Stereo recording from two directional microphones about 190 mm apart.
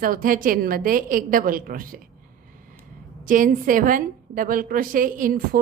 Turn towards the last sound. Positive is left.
turn(degrees=-45)  # may be behind; listen again after turning